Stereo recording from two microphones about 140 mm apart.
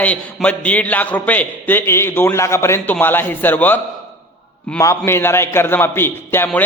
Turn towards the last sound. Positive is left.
turn(degrees=15)  # may be behind; listen again after turning